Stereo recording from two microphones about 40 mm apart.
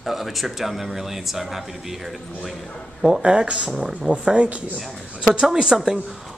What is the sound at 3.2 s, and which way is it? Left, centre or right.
Speech, right.